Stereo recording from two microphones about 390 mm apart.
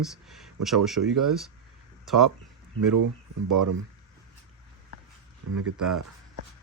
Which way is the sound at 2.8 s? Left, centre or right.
Right.